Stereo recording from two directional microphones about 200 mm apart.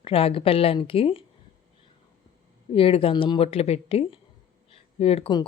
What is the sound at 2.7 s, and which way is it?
Speech, 30° left (ahead or behind).